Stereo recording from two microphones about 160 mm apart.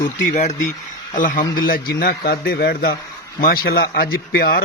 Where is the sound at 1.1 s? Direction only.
55° left (ahead or behind).